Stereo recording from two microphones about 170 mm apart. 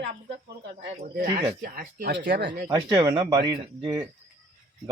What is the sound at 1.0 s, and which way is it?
Speech, 60° right (ahead or behind).